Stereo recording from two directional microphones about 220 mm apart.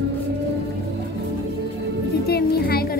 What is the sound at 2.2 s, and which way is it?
Speech, 45° left (ahead or behind).